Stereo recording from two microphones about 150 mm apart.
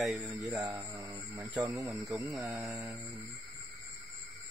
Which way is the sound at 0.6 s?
20° right (ahead or behind).